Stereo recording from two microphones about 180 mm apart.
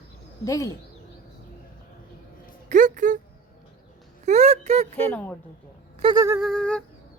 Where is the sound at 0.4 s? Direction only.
15° left (ahead or behind).